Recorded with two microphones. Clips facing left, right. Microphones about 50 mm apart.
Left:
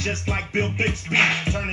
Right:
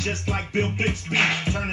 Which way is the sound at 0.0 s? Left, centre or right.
Left.